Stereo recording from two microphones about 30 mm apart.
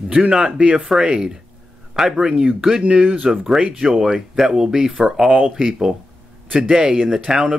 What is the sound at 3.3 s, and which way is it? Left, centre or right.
Speech, centre.